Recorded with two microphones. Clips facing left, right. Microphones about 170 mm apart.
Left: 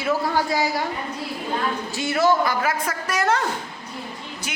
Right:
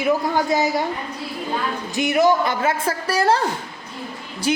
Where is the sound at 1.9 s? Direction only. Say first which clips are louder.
Right 3 dB; 20° right (ahead or behind).